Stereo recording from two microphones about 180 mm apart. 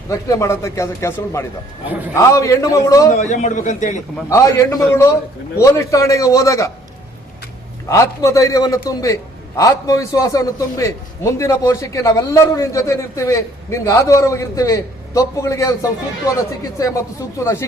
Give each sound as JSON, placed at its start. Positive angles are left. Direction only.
{"t": 0.1, "sound": "a man's voice", "side_deg": 15}
{"t": 3.2, "sound": "a man's voice", "side_deg": 40}
{"t": 4.3, "sound": "a man's voice", "side_deg": 15}
{"t": 7.9, "sound": "a man's voice", "side_deg": 15}